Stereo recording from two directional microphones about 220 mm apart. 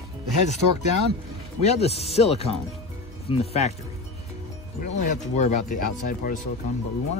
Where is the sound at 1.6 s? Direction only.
30° left (ahead or behind).